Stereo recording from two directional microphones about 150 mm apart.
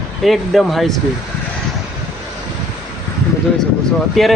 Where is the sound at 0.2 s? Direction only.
Centre (ahead or behind).